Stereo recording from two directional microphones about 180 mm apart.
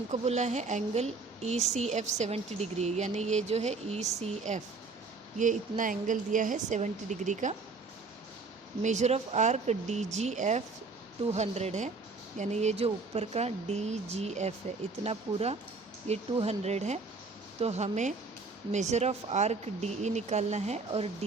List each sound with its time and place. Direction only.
0.1 s a woman's voice: 40° right (ahead or behind)
8.8 s a woman's voice: 40° right (ahead or behind)